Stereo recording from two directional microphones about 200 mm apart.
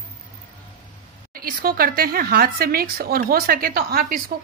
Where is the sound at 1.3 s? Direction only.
45° right (ahead or behind).